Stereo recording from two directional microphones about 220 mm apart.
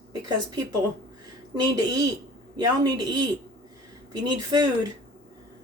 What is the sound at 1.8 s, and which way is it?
Speech, 15° right (ahead or behind).